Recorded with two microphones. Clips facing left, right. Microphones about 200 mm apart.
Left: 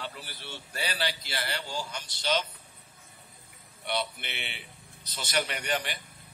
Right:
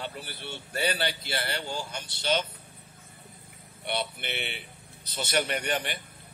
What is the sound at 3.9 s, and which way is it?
Speech, 55° right (ahead or behind).